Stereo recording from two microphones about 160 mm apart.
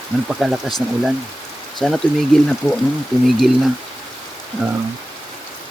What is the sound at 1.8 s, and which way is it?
Speech, 5° left (ahead or behind).